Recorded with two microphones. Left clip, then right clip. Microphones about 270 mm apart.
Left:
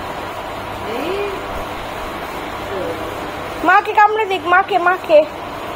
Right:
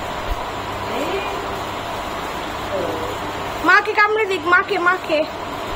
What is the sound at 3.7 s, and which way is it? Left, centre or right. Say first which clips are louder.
Speech: left 3 dB; centre.